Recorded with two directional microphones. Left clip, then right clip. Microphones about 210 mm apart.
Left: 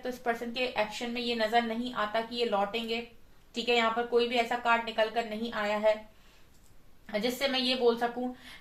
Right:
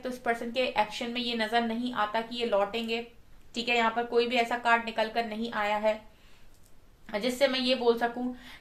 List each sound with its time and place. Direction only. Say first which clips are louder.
0.0 s a woman's voice: right 2 dB; 40° right (ahead or behind)
7.1 s a woman's voice: right 3 dB; 40° right (ahead or behind)